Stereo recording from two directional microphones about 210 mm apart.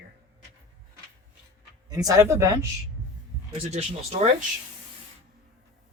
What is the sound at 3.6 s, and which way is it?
Speech, 30° right (ahead or behind).